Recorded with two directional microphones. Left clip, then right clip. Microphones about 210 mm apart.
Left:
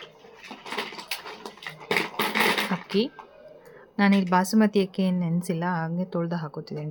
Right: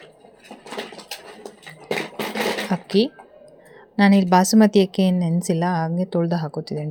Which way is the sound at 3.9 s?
20° right (ahead or behind).